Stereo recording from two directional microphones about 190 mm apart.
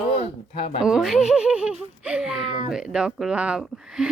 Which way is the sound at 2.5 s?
25° right (ahead or behind).